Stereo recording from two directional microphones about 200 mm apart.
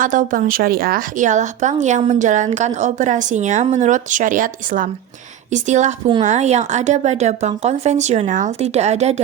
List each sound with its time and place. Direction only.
0.0 s a woman's voice: 40° right (ahead or behind)